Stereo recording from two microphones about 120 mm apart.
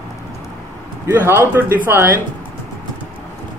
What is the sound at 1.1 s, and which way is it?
Speech, 15° right (ahead or behind).